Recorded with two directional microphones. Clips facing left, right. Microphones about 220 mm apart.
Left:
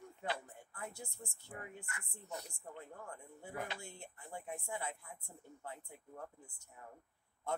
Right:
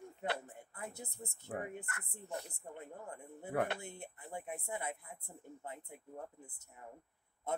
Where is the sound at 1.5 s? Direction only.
60° right (ahead or behind).